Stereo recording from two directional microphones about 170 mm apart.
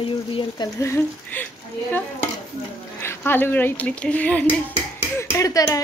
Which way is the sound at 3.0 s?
10° left (ahead or behind).